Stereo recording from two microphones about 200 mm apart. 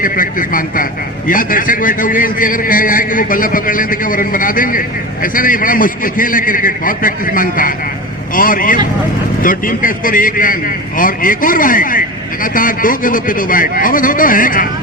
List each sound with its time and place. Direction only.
0.0 s a man's voice: 45° left (ahead or behind)